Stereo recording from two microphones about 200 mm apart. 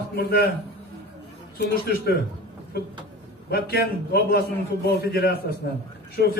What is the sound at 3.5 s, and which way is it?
A man's voice, 50° left (ahead or behind).